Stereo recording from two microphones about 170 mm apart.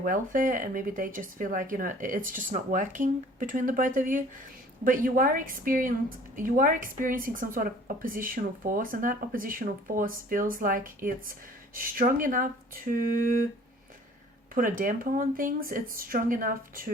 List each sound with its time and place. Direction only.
0.0 s a woman's voice: 55° right (ahead or behind)
14.5 s a woman's voice: 55° right (ahead or behind)